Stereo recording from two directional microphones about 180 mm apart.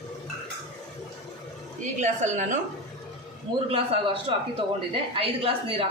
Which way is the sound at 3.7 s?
30° right (ahead or behind).